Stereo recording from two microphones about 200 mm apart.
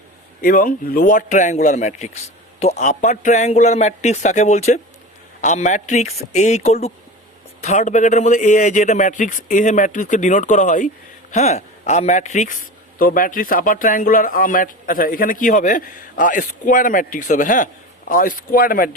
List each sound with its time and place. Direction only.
0.4 s a man's voice: 45° left (ahead or behind)